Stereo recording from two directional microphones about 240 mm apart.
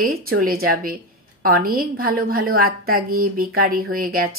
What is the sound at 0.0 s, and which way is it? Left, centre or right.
A woman's voice, right.